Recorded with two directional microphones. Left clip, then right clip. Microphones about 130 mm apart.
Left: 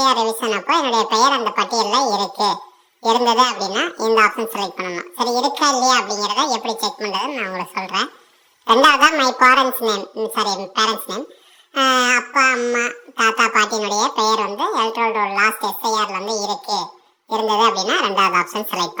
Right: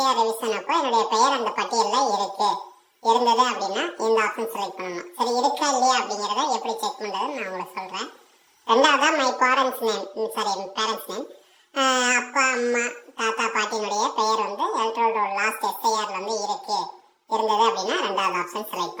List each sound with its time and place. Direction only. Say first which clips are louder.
0.0 s a woman's voice: left 5 dB; 45° left (ahead or behind)
3.0 s speech: left 4 dB; 50° left (ahead or behind)
8.6 s speech: left 6 dB; 45° left (ahead or behind)
11.7 s babbling: left 5 dB; 30° left (ahead or behind)
13.1 s speech: left 9 dB; 50° left (ahead or behind)